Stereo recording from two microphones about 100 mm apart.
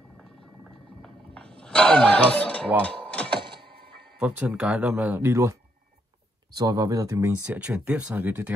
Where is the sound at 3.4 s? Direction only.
55° right (ahead or behind).